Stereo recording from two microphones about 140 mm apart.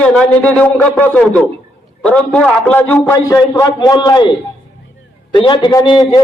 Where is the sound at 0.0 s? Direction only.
10° left (ahead or behind); by 4.3 s 30° left (ahead or behind).